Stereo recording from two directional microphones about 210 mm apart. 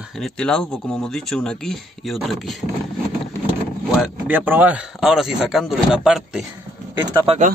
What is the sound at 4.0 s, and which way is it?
A man's voice, 10° right (ahead or behind).